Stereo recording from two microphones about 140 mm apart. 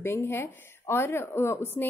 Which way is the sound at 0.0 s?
15° left (ahead or behind).